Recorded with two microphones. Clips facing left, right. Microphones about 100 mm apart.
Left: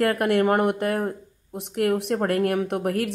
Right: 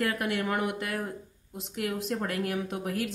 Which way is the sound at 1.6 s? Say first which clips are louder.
Left 9 dB; 60° left (ahead or behind).